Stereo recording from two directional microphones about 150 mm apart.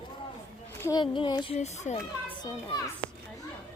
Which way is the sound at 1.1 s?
35° left (ahead or behind).